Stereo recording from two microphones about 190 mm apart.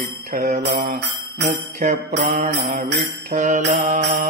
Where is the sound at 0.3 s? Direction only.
45° right (ahead or behind).